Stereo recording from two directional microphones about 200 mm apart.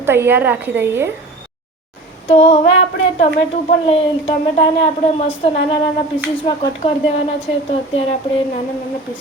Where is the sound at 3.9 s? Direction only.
30° left (ahead or behind).